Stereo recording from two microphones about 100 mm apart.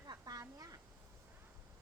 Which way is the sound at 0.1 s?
40° right (ahead or behind).